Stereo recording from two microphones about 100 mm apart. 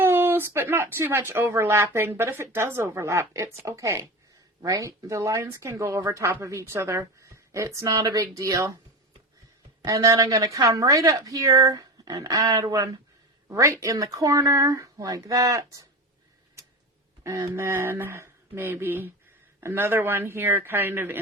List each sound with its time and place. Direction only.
0.0 s a woman's voice: 20° right (ahead or behind)
9.8 s a woman's voice: 35° right (ahead or behind)
17.2 s a woman's voice: 35° right (ahead or behind)